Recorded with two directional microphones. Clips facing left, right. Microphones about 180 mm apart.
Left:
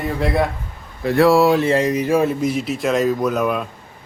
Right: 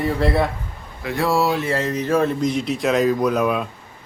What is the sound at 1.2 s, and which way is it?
Speech, 65° left (ahead or behind).